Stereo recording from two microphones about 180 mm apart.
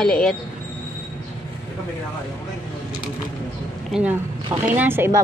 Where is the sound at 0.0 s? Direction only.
5° left (ahead or behind).